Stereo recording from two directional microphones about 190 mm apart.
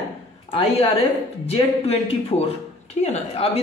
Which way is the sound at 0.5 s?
30° left (ahead or behind).